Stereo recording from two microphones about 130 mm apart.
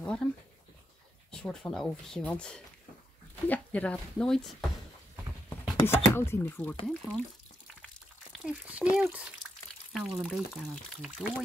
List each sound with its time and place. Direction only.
0.0 s dog: 10° left (ahead or behind)
1.3 s speech: 5° left (ahead or behind)
5.9 s speech: 20° left (ahead or behind)
6.9 s speech: 5° left (ahead or behind)
8.5 s speech: 10° right (ahead or behind)